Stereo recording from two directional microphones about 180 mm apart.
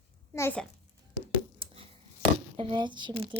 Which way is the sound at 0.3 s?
15° left (ahead or behind).